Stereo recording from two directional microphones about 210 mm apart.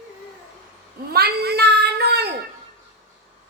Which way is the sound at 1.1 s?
50° right (ahead or behind).